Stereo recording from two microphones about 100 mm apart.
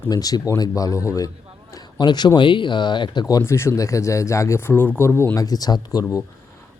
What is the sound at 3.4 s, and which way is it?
Speech, 25° left (ahead or behind).